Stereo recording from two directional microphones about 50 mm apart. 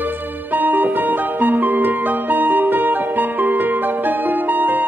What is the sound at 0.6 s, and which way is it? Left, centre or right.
Music, right.